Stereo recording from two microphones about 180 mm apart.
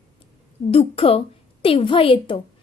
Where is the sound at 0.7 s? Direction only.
30° left (ahead or behind).